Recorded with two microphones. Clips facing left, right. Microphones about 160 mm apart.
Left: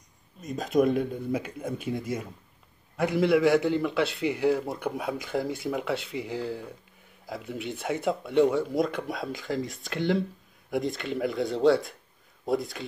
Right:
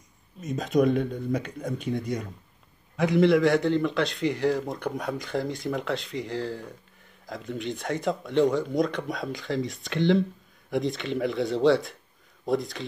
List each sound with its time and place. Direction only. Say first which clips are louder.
0.4 s a man's voice: right 1 dB; centre (ahead or behind)